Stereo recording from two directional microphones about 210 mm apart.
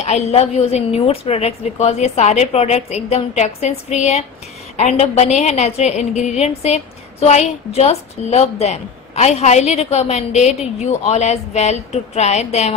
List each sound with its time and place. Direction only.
0.0 s a woman's voice: 30° left (ahead or behind)